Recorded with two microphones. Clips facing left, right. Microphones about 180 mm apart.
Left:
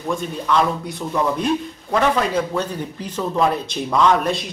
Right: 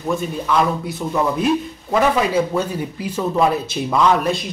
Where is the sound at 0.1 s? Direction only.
5° right (ahead or behind).